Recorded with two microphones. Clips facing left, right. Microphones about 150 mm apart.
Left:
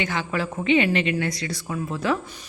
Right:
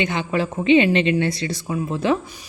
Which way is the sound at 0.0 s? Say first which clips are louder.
Right 4 dB; 20° right (ahead or behind).